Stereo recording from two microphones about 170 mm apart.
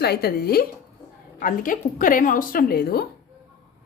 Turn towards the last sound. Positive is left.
turn(degrees=65)  # may be behind; listen again after turning